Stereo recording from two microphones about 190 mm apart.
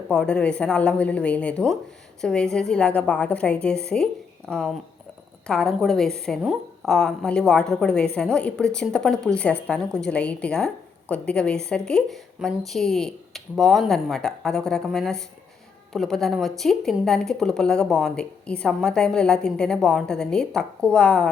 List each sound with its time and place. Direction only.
0.1 s speech: 5° left (ahead or behind)
5.5 s speech: centre (ahead or behind)